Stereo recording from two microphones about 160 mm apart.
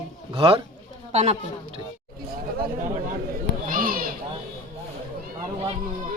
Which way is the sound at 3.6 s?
60° right (ahead or behind).